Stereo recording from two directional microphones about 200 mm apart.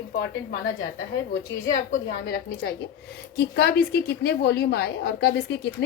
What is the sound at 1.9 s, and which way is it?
A woman's voice, 50° left (ahead or behind).